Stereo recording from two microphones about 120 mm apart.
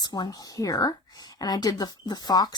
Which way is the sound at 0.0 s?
35° left (ahead or behind).